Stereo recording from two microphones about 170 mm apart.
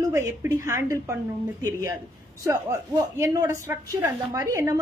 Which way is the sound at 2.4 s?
20° right (ahead or behind).